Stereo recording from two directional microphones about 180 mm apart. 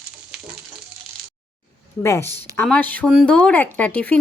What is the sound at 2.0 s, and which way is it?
Speech, 15° left (ahead or behind).